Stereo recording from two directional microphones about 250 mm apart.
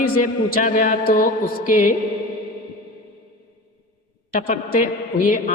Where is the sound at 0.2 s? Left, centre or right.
Left.